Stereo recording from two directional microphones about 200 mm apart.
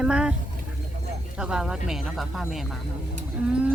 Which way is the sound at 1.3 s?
5° right (ahead or behind).